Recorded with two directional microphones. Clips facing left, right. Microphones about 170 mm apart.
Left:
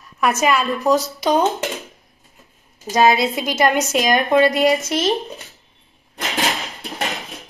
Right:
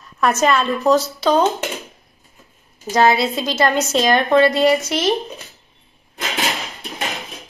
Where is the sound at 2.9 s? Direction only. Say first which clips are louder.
Even; 15° left (ahead or behind).